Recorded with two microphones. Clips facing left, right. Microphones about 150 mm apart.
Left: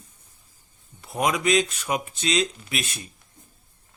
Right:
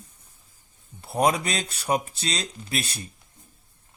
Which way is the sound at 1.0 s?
35° right (ahead or behind).